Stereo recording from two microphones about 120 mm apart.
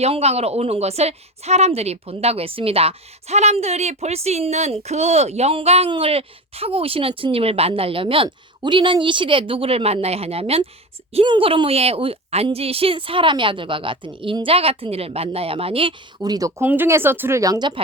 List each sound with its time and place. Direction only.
0.0 s speech: 60° right (ahead or behind); by 16.5 s 30° right (ahead or behind)
16.6 s speech: 15° right (ahead or behind); by 17.7 s 35° right (ahead or behind)